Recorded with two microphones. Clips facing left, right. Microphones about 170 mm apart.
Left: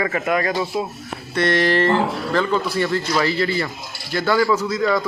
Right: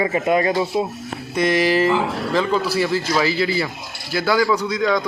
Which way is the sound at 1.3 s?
10° right (ahead or behind).